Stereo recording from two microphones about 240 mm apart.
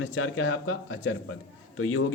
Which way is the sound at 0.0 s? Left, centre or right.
Left.